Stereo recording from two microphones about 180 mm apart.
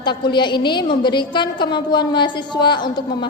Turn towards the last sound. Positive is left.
turn(degrees=25)  # may be behind; listen again after turning